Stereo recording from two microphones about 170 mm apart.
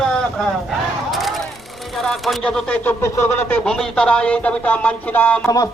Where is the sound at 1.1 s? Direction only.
Centre (ahead or behind).